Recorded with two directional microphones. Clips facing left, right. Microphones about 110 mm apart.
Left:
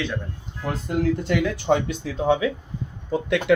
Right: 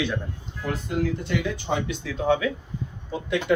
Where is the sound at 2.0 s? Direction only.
30° left (ahead or behind).